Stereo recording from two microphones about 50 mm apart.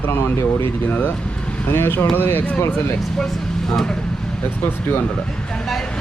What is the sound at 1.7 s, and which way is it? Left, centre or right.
Speech, left.